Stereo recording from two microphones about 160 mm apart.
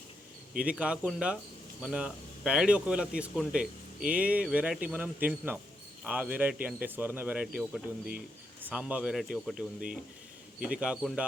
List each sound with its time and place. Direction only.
0.6 s speech: 5° right (ahead or behind)